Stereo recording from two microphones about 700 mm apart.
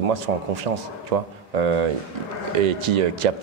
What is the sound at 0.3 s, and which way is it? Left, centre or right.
Speech, right.